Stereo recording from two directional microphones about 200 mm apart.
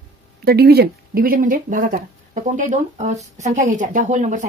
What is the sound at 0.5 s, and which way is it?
Speech, 55° right (ahead or behind).